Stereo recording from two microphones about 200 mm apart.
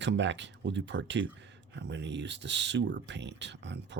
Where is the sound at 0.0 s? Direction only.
65° right (ahead or behind).